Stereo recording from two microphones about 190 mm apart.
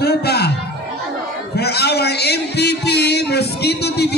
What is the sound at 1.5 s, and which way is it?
A man's voice, 60° left (ahead or behind).